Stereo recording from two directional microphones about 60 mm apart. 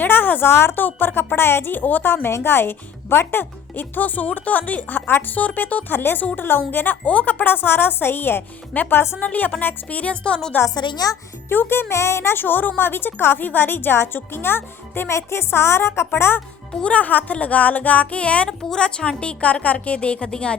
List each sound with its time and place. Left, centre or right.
0.0 s a woman's voice: left; by 10.5 s centre
10.9 s a child's voice: left
11.4 s a woman's voice: left
16.8 s a woman's voice: left
18.4 s a woman's voice: centre